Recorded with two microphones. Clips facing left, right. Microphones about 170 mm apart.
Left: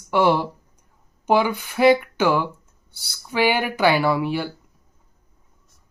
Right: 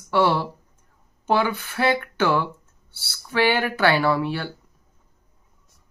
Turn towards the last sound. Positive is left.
turn(degrees=10)  # may be behind; listen again after turning